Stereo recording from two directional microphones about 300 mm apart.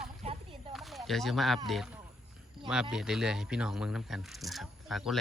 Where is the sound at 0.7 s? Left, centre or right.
Centre.